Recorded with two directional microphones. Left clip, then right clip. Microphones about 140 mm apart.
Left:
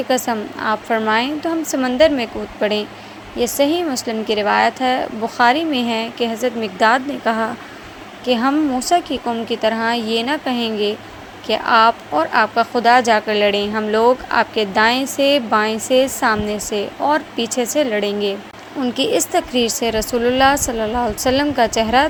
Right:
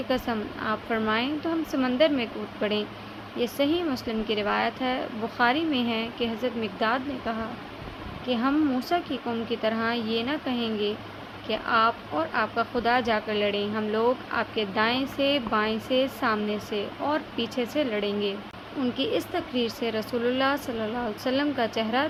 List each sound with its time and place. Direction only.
0.1 s a woman's voice: 40° left (ahead or behind)
8.8 s a woman's voice: 35° left (ahead or behind)